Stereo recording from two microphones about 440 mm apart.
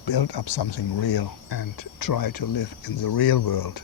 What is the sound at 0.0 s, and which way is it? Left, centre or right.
Speech, left.